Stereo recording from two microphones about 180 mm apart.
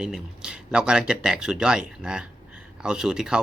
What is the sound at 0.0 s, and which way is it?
Speech, 5° right (ahead or behind).